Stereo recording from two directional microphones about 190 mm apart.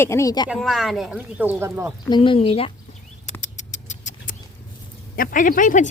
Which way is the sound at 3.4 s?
40° left (ahead or behind).